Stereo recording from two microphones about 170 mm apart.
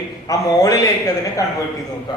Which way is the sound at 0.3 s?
20° left (ahead or behind).